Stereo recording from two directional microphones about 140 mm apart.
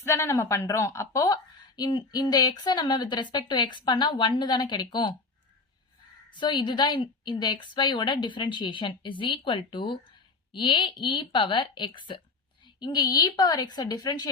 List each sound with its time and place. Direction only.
0.0 s speech: 20° left (ahead or behind)
6.3 s a woman's voice: 35° left (ahead or behind)